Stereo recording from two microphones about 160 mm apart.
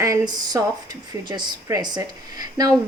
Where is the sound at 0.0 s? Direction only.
20° right (ahead or behind).